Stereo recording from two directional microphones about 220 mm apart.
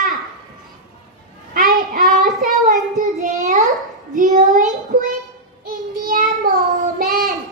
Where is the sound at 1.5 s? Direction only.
40° right (ahead or behind).